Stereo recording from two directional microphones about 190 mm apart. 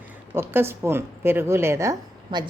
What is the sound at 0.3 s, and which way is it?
A woman's voice, 10° right (ahead or behind).